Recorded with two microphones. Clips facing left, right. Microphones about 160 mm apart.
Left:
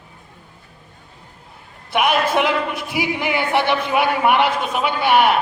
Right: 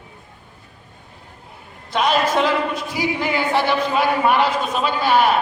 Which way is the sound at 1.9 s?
15° left (ahead or behind).